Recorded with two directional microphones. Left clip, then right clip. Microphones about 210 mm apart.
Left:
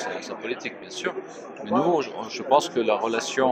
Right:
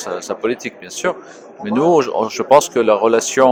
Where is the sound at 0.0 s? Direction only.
55° right (ahead or behind).